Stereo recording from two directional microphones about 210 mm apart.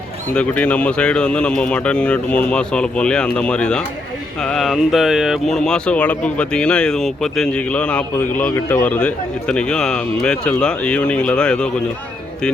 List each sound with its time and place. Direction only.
0.3 s speech: 5° left (ahead or behind)